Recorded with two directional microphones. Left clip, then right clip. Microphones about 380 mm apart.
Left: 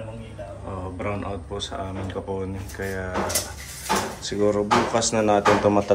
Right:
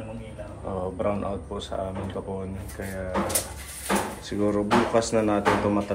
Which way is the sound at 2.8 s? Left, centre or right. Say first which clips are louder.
Left 6 dB; centre.